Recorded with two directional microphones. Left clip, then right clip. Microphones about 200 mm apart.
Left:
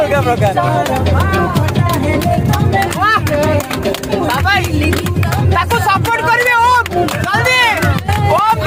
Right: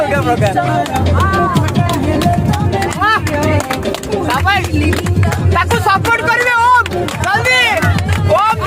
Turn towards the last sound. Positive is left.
turn(degrees=-10)  # may be behind; listen again after turning